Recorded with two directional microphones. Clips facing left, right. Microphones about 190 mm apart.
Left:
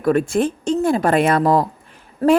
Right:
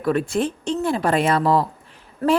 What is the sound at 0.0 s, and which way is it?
A woman's voice, 50° left (ahead or behind).